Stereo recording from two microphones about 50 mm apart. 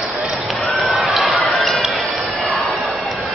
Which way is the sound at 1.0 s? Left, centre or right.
Centre.